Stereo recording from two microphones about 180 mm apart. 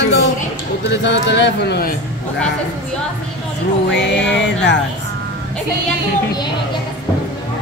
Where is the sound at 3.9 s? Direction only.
80° left.